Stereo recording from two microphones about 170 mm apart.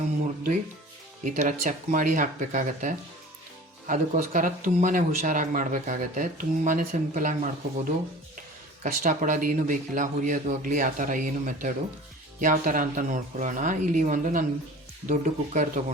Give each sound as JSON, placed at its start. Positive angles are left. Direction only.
{"t": 1.2, "sound": "speech", "side_deg": -50}